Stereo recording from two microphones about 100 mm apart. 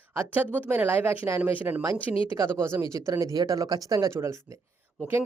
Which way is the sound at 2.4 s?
25° right (ahead or behind).